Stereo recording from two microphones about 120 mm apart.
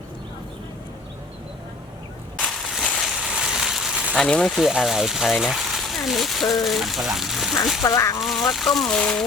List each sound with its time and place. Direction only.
2.4 s a sound: centre (ahead or behind)
4.2 s speech: 5° left (ahead or behind)
7.9 s speech: 30° left (ahead or behind)
8.2 s speech: centre (ahead or behind)